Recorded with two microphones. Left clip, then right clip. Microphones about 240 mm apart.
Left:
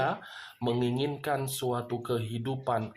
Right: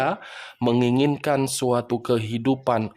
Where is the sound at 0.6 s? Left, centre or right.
Right.